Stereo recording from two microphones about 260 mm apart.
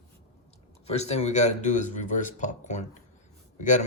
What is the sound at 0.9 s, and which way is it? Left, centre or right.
Speech, left.